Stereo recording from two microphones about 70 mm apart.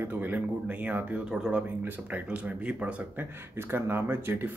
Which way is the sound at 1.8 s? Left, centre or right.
Right.